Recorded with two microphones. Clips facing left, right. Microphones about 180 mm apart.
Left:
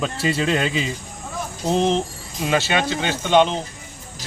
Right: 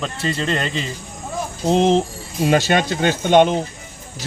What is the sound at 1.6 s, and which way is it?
A man's voice, 30° right (ahead or behind).